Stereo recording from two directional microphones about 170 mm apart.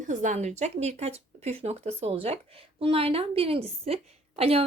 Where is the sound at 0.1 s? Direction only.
45° right (ahead or behind).